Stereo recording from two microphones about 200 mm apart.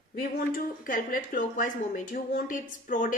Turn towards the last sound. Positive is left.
turn(degrees=40)  # may be behind; listen again after turning